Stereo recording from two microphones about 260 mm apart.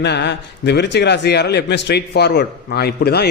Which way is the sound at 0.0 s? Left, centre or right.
Left.